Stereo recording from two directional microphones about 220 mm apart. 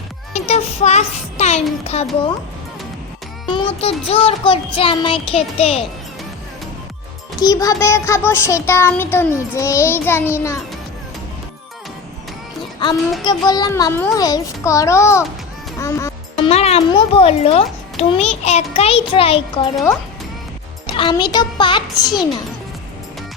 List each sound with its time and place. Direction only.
0.3 s a child's voice: 30° left (ahead or behind)
3.4 s music: 25° left (ahead or behind)
4.1 s a child's voice: 25° left (ahead or behind)
7.3 s a sound: 15° left (ahead or behind)
13.2 s a sound: 20° left (ahead or behind)
15.8 s music: 15° left (ahead or behind)
16.5 s a child's voice: 30° left (ahead or behind)
20.8 s a child's voice: 20° left (ahead or behind)